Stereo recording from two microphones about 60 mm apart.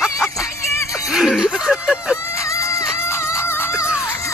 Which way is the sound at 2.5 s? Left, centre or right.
Left.